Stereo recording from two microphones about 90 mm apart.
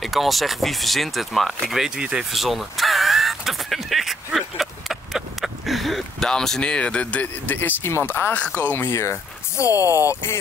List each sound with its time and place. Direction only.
0.0 s speech: centre (ahead or behind); by 10.4 s 30° left (ahead or behind)